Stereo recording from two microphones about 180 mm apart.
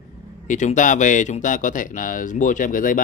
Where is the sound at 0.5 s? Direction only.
45° left (ahead or behind).